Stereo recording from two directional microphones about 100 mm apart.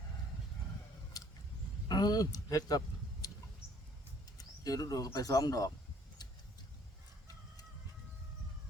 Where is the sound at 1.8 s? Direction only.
45° left (ahead or behind).